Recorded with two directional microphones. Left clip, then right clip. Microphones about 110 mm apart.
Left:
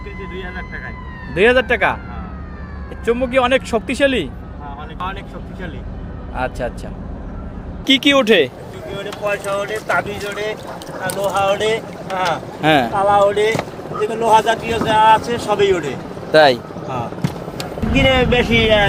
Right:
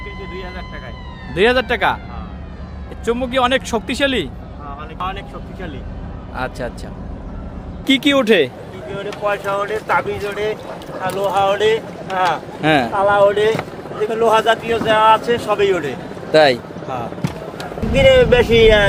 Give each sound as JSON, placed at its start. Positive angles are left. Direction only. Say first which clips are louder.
{"t": 1.3, "sound": "speech", "louder": "left 2 dB", "side_deg": -15}
{"t": 3.1, "sound": "speech", "louder": "left 1 dB", "side_deg": -15}
{"t": 6.3, "sound": "speech", "louder": "left 2 dB", "side_deg": -5}
{"t": 7.9, "sound": "speech", "louder": "left 1 dB", "side_deg": -20}
{"t": 11.2, "sound": "speech", "louder": "right 1 dB", "side_deg": -30}
{"t": 12.6, "sound": "speech", "louder": "left 1 dB", "side_deg": -10}
{"t": 12.9, "sound": "speech", "louder": "even", "side_deg": -25}
{"t": 18.0, "sound": "speech", "louder": "right 4 dB", "side_deg": -35}